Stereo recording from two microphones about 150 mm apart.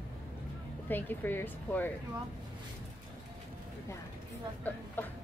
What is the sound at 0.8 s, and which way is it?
Speech, 15° left (ahead or behind).